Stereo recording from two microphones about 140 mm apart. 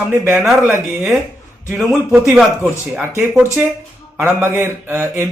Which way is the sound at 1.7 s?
5° right (ahead or behind).